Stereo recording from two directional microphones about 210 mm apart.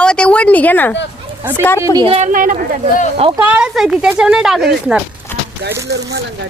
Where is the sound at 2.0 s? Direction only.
30° right (ahead or behind).